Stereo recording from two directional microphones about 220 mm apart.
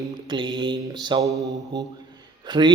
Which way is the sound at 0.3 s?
20° right (ahead or behind).